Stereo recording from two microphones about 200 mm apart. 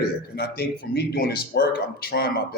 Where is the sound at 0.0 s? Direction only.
50° left (ahead or behind).